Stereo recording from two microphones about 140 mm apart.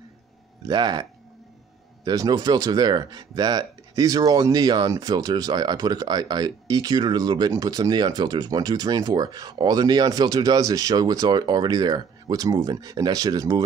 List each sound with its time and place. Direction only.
0.7 s speech: 30° right (ahead or behind)
2.0 s speech: 25° right (ahead or behind)